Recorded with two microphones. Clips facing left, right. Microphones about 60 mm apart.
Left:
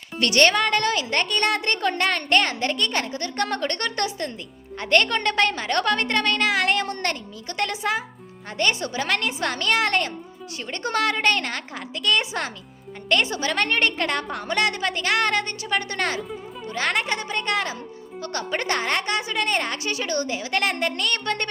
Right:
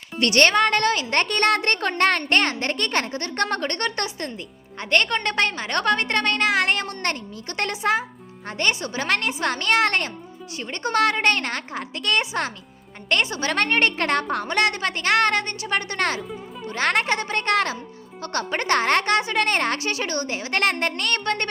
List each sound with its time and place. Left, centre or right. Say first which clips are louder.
0.2 s a woman's voice: right 1 dB; right
3.6 s a woman's voice: even; right
13.3 s a woman's voice: right 1 dB; right
18.5 s a woman's voice: right 3 dB; right
18.8 s a woman's voice: right 5 dB; right
19.8 s a woman's voice: even; right